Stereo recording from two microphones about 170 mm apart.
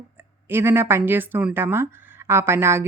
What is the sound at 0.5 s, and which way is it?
A woman's voice, 15° right (ahead or behind).